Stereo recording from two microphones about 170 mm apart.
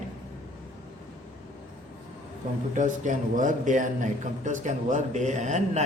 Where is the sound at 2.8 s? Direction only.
45° right (ahead or behind).